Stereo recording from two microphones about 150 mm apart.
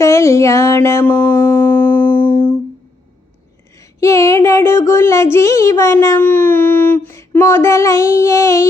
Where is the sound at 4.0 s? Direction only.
20° left (ahead or behind).